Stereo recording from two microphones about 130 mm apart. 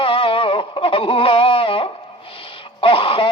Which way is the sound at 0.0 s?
45° left (ahead or behind).